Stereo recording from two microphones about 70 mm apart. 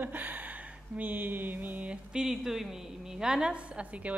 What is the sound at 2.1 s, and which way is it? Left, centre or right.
A woman's voice, centre.